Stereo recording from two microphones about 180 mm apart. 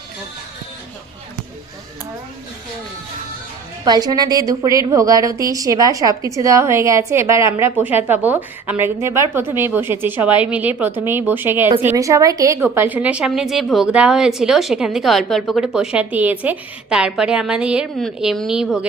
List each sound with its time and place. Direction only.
3.8 s a woman's voice: 20° right (ahead or behind); by 18.9 s 5° right (ahead or behind)